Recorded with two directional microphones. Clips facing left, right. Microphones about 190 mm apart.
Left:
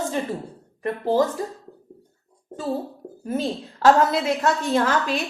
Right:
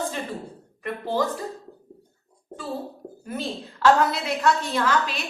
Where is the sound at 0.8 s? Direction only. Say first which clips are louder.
Left 5 dB; 40° left (ahead or behind).